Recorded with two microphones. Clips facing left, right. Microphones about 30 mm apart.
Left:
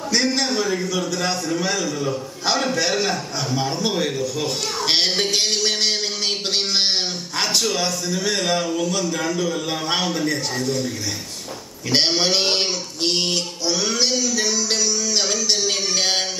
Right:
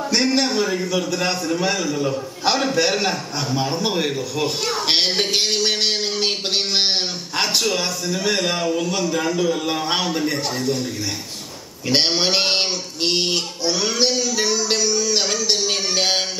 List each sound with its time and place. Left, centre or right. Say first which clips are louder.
0.1 s a man's voice: right 1 dB; centre
11.9 s a sound: even; centre
15.3 s music: right 1 dB; centre